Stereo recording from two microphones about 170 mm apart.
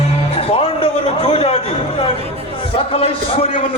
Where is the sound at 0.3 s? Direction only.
35° left (ahead or behind).